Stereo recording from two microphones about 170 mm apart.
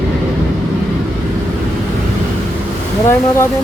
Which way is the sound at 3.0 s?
15° left (ahead or behind).